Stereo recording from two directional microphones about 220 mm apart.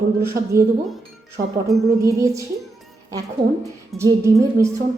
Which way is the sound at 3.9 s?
15° right (ahead or behind).